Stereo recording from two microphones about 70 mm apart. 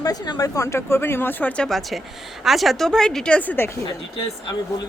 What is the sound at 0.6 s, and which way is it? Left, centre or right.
Speech, left.